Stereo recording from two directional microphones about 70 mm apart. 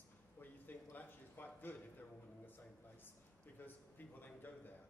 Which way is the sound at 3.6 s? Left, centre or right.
Left.